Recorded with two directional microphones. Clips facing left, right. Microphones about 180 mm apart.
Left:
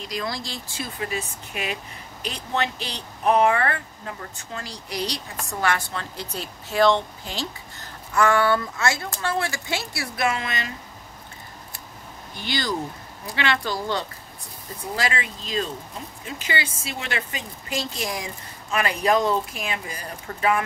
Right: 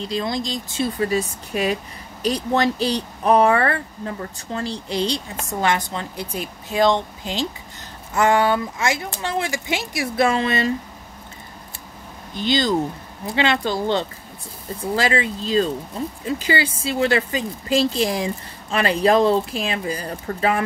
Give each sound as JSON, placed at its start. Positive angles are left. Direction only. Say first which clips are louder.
{"t": 0.0, "sound": "speech", "louder": "right 6 dB", "side_deg": -25}
{"t": 0.9, "sound": "speech", "louder": "right 8 dB", "side_deg": -35}
{"t": 10.1, "sound": "speech", "louder": "right 7 dB", "side_deg": -30}
{"t": 12.4, "sound": "speech", "louder": "right 8 dB", "side_deg": -20}